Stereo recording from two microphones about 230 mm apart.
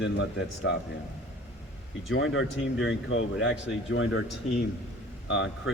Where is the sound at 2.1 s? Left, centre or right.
Left.